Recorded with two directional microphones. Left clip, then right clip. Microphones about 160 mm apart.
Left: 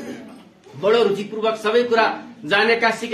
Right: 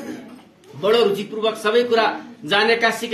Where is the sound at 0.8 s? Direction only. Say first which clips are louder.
Even; 25° right (ahead or behind).